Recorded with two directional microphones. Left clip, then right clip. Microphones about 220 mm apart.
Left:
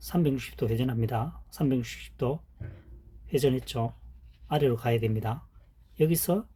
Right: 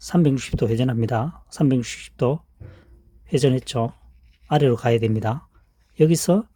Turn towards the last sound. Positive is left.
turn(degrees=-45)  # may be behind; listen again after turning